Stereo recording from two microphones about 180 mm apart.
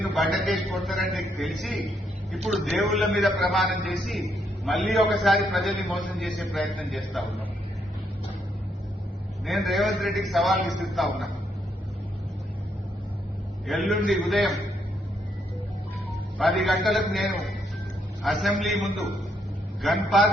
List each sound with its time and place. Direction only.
0.0 s a man's voice: centre (ahead or behind)
9.5 s a man's voice: centre (ahead or behind)
13.7 s a man's voice: centre (ahead or behind)
16.4 s a man's voice: centre (ahead or behind)